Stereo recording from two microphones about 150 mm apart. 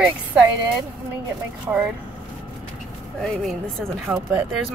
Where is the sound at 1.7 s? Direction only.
15° right (ahead or behind).